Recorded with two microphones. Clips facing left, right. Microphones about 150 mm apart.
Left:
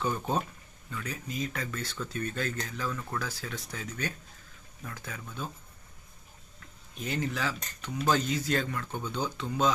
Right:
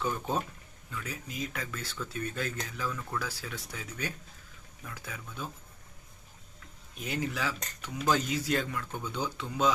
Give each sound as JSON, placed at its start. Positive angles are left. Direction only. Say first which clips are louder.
{"t": 0.9, "sound": "speech", "louder": "left 2 dB", "side_deg": -5}
{"t": 6.9, "sound": "speech", "louder": "left 1 dB", "side_deg": -10}